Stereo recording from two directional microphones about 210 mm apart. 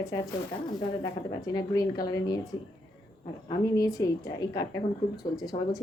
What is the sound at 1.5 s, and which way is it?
Speech, 20° left (ahead or behind).